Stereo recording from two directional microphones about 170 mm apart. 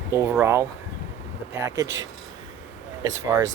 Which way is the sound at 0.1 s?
15° right (ahead or behind).